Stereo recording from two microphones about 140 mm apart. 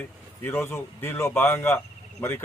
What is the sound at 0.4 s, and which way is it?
A man's voice, 15° left (ahead or behind).